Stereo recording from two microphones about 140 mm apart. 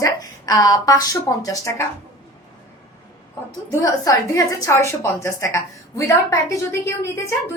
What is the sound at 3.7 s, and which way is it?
A woman's voice, 20° left (ahead or behind).